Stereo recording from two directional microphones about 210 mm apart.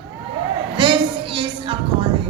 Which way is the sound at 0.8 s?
25° right (ahead or behind).